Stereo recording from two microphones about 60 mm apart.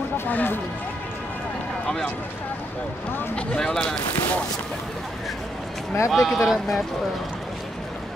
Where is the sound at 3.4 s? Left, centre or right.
Centre.